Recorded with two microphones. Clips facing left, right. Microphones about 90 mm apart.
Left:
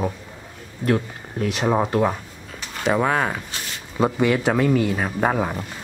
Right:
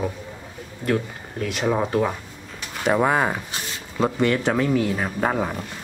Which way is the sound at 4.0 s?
5° left (ahead or behind).